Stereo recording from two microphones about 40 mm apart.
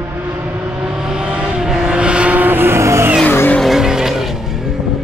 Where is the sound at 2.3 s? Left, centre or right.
Right.